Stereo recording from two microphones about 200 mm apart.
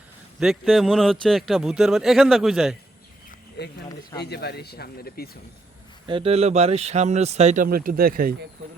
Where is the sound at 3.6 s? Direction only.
55° left (ahead or behind).